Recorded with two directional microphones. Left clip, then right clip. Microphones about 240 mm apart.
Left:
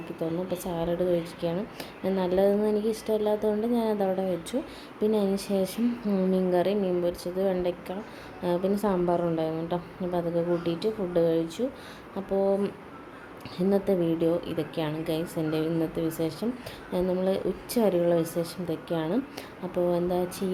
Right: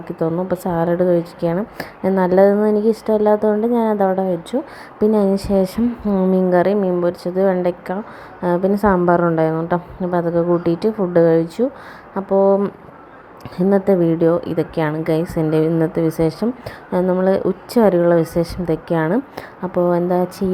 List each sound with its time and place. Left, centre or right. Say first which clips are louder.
0.2 s a woman's voice: right 11 dB; right